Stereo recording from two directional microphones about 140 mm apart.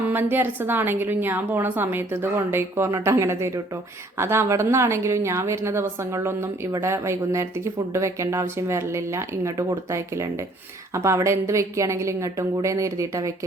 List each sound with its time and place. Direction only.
0.1 s a woman's voice: 15° right (ahead or behind)